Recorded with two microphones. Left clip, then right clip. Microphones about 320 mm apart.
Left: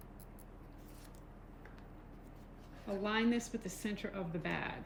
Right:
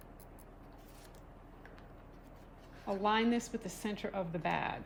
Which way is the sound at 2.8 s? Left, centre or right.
Centre.